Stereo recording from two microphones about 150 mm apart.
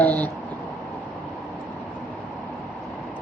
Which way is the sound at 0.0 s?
10° left (ahead or behind).